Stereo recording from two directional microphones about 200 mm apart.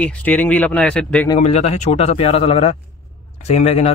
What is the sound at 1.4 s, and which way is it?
Speech, 30° left (ahead or behind).